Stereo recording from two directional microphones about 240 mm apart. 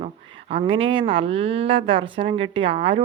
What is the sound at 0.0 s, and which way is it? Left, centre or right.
Speech, right.